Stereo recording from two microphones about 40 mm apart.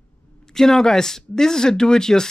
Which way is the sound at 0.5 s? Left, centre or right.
Centre.